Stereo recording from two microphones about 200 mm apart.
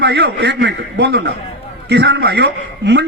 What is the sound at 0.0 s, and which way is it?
A man's voice, 60° right (ahead or behind).